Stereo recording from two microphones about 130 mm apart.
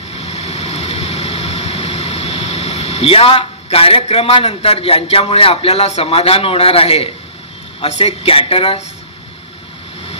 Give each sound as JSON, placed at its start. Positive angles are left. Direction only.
{"t": 0.1, "sound": "vehicle", "side_deg": 55}
{"t": 7.8, "sound": "a man's voice", "side_deg": 50}